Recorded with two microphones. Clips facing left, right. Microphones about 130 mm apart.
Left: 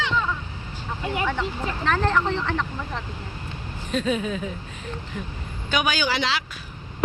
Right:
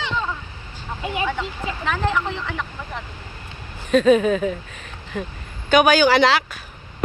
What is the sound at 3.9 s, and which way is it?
Speech, 70° right (ahead or behind).